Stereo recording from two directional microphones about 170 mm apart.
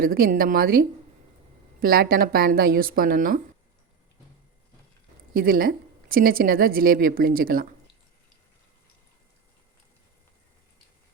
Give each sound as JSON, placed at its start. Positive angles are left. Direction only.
{"t": 0.0, "sound": "a woman's voice", "side_deg": -60}
{"t": 5.3, "sound": "a woman's voice", "side_deg": -60}